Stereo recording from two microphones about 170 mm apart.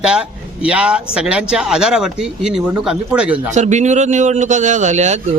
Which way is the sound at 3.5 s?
45° right (ahead or behind).